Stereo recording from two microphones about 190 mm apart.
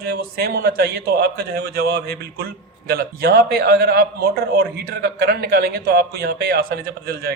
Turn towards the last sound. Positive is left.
turn(degrees=-55)  # may be behind; listen again after turning